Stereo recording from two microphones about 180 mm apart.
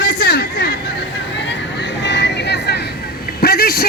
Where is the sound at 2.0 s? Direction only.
70° left (ahead or behind).